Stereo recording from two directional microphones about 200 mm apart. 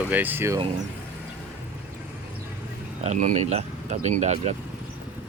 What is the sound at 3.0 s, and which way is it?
Speech, 35° right (ahead or behind).